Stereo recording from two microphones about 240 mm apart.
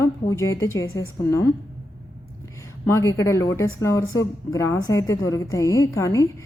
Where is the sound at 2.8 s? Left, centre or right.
Centre.